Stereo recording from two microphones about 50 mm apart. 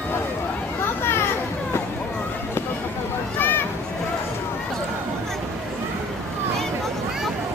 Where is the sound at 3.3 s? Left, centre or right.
Left.